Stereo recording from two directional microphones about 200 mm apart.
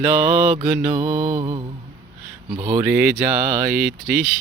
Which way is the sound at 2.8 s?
5° right (ahead or behind).